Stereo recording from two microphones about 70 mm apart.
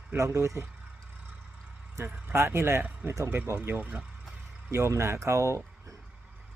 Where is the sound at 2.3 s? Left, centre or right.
Right.